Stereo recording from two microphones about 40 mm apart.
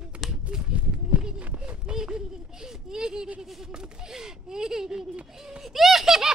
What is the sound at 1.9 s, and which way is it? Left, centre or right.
Speech, centre.